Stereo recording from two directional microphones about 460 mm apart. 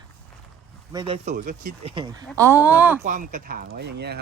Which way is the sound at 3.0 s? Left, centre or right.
Centre.